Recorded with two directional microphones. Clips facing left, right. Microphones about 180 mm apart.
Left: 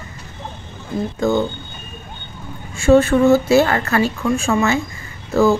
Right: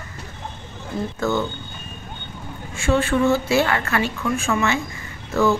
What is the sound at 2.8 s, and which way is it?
A woman's voice, 40° left (ahead or behind).